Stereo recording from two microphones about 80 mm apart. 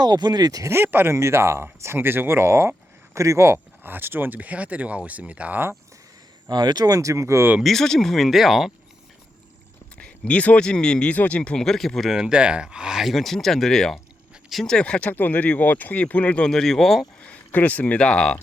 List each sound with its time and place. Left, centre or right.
0.0 s speech: right
0.7 s speech: right
3.8 s speech: right
6.5 s speech: right
7.6 s speech: centre
10.0 s speech: centre
15.1 s speech: left; by 17.1 s centre
17.2 s speech: centre